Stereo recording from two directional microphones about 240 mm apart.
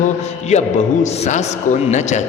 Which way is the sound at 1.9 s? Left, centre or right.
Left.